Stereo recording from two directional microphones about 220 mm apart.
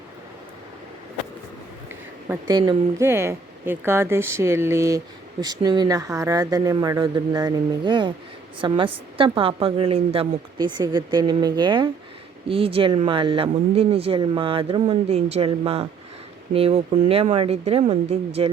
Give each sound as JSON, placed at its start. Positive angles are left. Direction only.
{"t": 2.5, "sound": "speech", "side_deg": -20}